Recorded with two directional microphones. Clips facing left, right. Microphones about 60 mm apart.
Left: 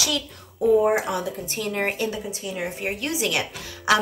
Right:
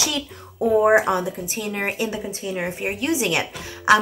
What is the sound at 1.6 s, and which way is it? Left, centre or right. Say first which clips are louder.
A woman's voice: left 1 dB; centre.